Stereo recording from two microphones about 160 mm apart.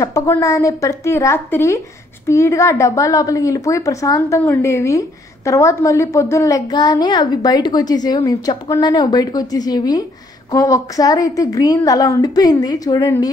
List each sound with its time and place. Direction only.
0.0 s a woman's voice: 20° left (ahead or behind)